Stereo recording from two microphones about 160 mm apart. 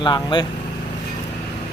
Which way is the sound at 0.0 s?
30° left (ahead or behind).